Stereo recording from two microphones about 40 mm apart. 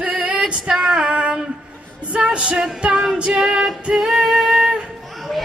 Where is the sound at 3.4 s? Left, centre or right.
Centre.